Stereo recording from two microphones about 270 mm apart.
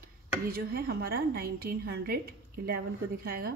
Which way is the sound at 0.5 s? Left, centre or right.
Right.